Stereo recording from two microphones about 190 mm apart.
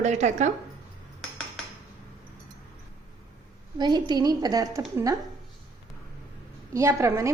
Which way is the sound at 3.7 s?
20° right (ahead or behind).